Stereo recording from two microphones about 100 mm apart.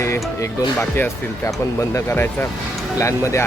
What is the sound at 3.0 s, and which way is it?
Music, 30° left (ahead or behind).